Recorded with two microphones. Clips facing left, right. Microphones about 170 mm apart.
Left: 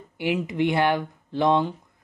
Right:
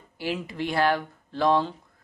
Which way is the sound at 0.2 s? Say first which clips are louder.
Left 6 dB; 20° left (ahead or behind).